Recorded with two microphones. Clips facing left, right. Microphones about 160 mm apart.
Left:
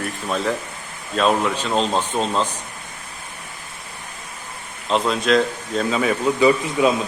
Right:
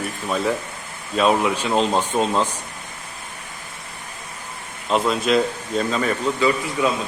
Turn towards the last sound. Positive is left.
turn(degrees=20)  # may be behind; listen again after turning